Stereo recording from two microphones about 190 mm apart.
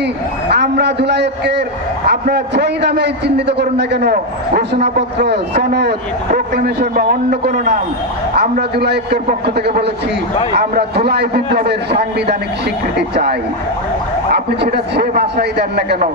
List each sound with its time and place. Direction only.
0.5 s a man's voice: 60° right (ahead or behind)